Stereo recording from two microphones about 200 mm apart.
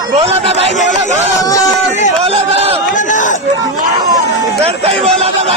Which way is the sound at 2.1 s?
30° right (ahead or behind).